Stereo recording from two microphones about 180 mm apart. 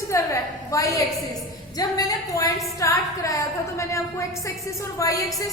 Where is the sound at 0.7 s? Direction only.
20° left (ahead or behind).